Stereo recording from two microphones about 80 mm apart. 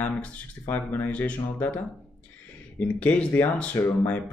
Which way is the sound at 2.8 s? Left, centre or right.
Centre.